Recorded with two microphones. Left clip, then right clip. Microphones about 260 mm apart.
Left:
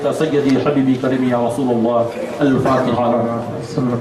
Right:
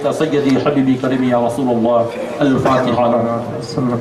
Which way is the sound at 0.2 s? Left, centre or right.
Centre.